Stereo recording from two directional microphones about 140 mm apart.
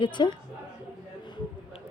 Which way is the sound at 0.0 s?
35° left (ahead or behind).